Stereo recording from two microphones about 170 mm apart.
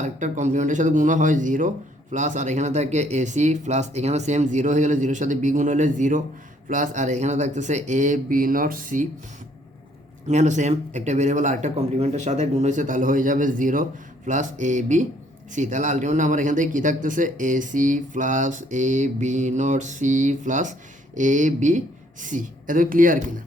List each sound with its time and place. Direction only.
0.0 s speech: 45° right (ahead or behind)
10.2 s speech: 45° right (ahead or behind)